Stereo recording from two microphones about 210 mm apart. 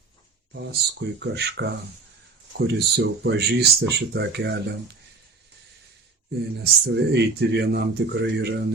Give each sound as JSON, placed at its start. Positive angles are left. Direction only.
{"t": 0.5, "sound": "speech", "side_deg": -50}
{"t": 6.6, "sound": "speech", "side_deg": -50}